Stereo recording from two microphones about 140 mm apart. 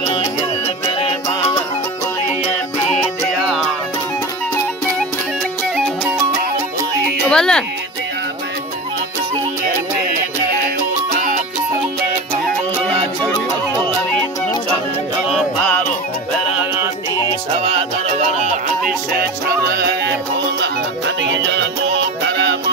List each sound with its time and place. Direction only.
0.8 s music: 50° left (ahead or behind)
7.2 s speech: 5° left (ahead or behind)